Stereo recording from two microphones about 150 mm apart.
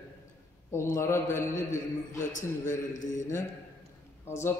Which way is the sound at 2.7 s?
55° left (ahead or behind).